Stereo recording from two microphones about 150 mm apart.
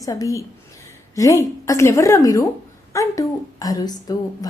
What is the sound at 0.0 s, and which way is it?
A woman's voice, 25° left (ahead or behind).